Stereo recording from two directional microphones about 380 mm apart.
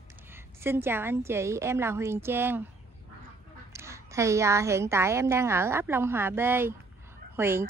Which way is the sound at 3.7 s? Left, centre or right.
Centre.